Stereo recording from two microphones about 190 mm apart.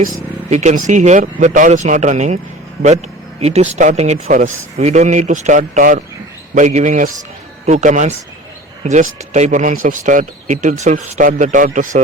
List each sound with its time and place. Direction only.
0.1 s speech: 40° right (ahead or behind)
3.4 s speech: 35° right (ahead or behind)